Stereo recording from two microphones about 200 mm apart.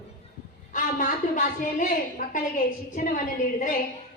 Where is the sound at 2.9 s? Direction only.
40° left (ahead or behind).